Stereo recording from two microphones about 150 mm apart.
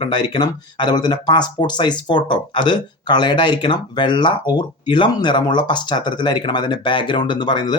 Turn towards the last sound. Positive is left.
turn(degrees=30)  # may be behind; listen again after turning